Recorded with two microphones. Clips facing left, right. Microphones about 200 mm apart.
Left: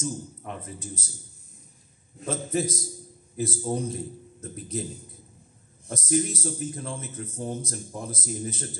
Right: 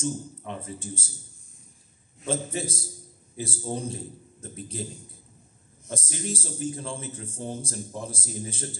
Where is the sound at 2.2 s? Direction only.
30° right (ahead or behind).